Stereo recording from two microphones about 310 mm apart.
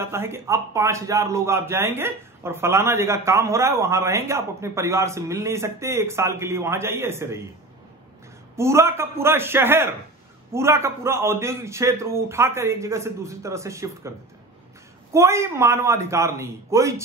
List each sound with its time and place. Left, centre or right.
0.0 s a man's voice: centre
8.5 s a man's voice: centre
15.1 s a man's voice: centre